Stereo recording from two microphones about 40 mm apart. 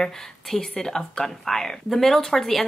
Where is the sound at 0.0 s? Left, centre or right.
Centre.